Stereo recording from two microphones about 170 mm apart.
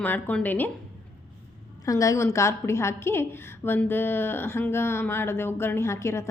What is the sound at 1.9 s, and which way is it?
A woman's voice, 20° left (ahead or behind).